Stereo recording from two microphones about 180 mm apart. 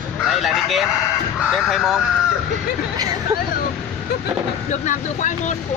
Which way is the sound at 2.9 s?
20° right (ahead or behind).